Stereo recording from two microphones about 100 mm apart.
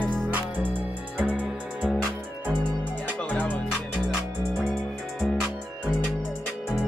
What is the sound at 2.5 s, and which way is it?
Music, 15° left (ahead or behind).